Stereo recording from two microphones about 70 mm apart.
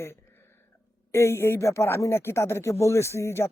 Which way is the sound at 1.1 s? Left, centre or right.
Left.